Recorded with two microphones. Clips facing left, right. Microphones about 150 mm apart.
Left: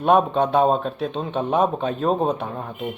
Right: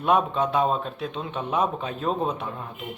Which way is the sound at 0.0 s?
40° left (ahead or behind).